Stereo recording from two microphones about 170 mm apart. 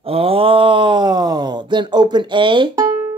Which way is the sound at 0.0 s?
35° right (ahead or behind).